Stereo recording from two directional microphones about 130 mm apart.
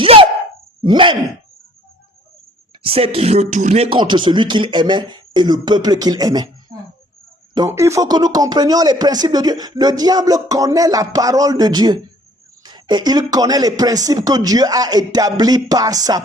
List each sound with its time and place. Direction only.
0.0 s a sound: 40° right (ahead or behind)
0.8 s speech: 40° right (ahead or behind)
2.8 s speech: 45° right (ahead or behind); by 3.8 s 65° right (ahead or behind)
3.8 s speech: 40° right (ahead or behind)